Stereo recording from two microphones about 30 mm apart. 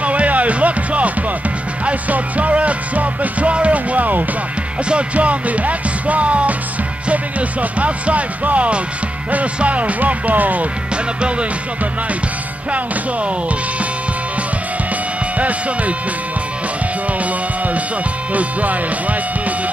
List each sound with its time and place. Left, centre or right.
0.0 s music: right
4.8 s speech: right
9.6 s music: right
11.1 s music: right
15.3 s music: right
17.2 s music: right